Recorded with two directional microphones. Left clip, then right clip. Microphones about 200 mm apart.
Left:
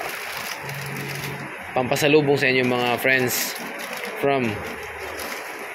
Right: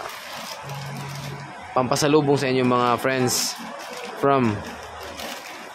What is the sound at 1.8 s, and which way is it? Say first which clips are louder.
Speech: left 1 dB; 20° right (ahead or behind).